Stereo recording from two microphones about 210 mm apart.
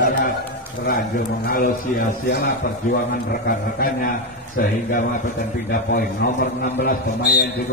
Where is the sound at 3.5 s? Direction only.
40° left (ahead or behind).